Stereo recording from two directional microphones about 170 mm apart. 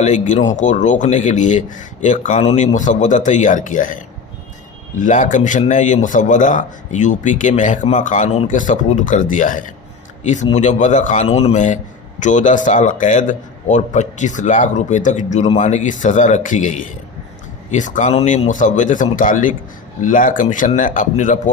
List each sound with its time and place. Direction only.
0.0 s a man's voice: 45° left (ahead or behind)